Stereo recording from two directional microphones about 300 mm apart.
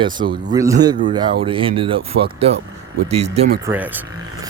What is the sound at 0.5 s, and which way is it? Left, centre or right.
Speech, centre.